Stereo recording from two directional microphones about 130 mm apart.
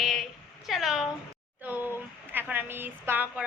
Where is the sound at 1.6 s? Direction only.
10° right (ahead or behind).